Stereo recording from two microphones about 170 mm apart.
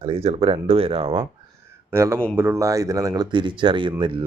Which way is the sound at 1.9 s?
15° right (ahead or behind).